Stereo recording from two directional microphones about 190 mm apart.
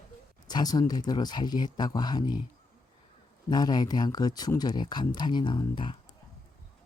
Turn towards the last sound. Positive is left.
turn(degrees=25)  # may be behind; listen again after turning